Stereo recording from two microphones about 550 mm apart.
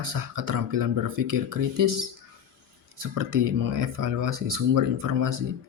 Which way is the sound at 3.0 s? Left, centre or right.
Right.